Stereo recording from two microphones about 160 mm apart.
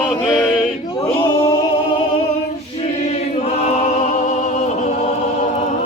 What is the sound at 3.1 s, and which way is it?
Choir, 40° left (ahead or behind).